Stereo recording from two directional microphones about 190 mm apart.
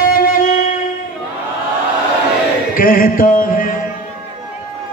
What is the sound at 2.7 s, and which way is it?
Music, 45° left (ahead or behind).